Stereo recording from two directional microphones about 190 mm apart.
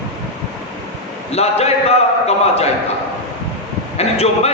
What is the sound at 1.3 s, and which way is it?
A man's voice, 35° left (ahead or behind).